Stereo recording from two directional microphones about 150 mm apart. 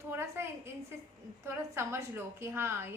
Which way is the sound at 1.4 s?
15° right (ahead or behind).